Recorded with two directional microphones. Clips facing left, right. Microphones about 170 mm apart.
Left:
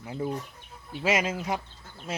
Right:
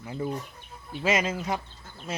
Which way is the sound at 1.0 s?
10° left (ahead or behind).